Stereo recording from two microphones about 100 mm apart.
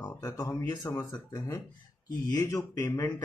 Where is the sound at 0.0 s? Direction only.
35° left (ahead or behind).